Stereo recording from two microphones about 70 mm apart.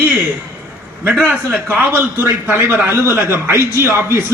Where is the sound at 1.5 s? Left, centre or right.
Right.